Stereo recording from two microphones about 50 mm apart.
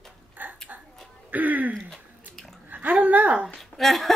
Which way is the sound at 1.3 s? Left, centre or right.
Right.